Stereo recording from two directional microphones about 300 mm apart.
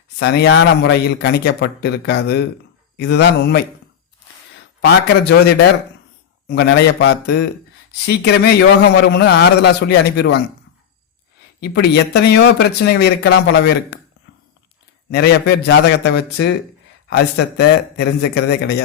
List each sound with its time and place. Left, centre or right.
0.2 s a man's voice: left
6.5 s a man's voice: left
11.6 s a man's voice: left
15.1 s a man's voice: left